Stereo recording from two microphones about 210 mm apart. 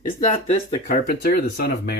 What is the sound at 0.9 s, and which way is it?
Speech, 45° left (ahead or behind).